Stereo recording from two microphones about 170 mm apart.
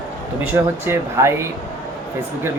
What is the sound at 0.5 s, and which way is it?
Speech, 15° right (ahead or behind).